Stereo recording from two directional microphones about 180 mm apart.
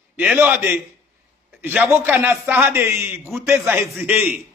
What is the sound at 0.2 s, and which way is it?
A man's voice, 10° right (ahead or behind).